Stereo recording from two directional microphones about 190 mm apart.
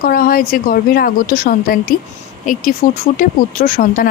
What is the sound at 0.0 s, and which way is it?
Speech, 50° left (ahead or behind).